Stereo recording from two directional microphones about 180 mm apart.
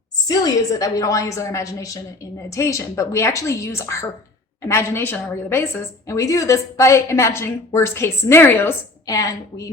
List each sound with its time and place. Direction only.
0.3 s a woman's voice: 20° left (ahead or behind)